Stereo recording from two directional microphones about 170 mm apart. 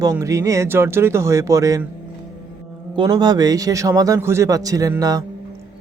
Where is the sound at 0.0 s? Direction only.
20° right (ahead or behind).